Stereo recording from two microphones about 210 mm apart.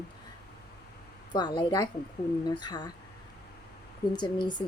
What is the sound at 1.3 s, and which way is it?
Speech, 20° left (ahead or behind).